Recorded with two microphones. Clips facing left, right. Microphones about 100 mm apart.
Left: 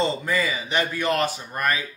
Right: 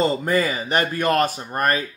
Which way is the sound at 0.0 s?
45° right (ahead or behind).